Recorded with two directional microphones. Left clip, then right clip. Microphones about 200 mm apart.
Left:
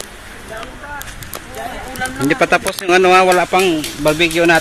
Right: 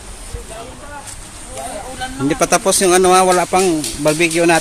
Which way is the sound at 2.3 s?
10° right (ahead or behind).